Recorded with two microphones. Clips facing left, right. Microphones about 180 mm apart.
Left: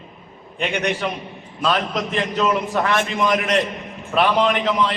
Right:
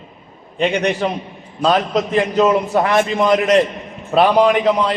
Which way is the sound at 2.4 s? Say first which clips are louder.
Right 5 dB; 35° right (ahead or behind).